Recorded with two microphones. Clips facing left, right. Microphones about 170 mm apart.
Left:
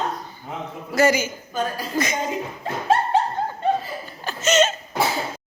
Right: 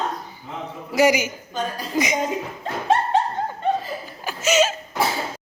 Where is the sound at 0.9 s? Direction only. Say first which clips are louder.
Right 1 dB; 15° right (ahead or behind).